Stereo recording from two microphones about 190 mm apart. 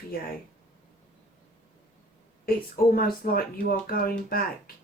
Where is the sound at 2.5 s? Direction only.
50° left (ahead or behind).